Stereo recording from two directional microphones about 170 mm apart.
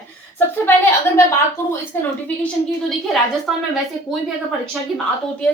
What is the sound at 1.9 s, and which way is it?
Speech, 15° left (ahead or behind).